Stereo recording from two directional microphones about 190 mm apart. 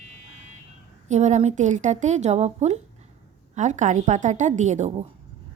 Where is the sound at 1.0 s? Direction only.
40° right (ahead or behind).